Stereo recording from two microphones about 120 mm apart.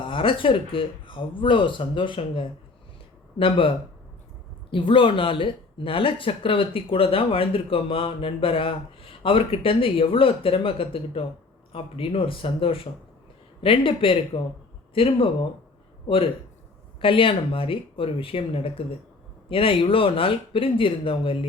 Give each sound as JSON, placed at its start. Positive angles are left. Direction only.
{"t": 0.0, "sound": "speech", "side_deg": 45}
{"t": 4.7, "sound": "speech", "side_deg": 45}